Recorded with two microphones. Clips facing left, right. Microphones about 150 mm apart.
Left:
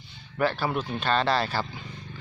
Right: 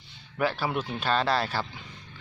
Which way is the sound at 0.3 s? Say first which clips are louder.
Left 2 dB; 5° right (ahead or behind).